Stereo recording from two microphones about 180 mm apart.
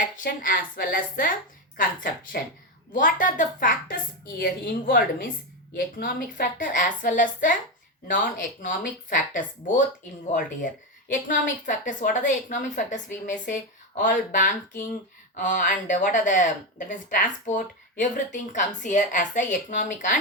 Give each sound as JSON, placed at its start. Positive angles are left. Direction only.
{"t": 0.0, "sound": "a woman's voice", "side_deg": 50}
{"t": 2.9, "sound": "a woman's voice", "side_deg": 50}
{"t": 11.1, "sound": "speech", "side_deg": 45}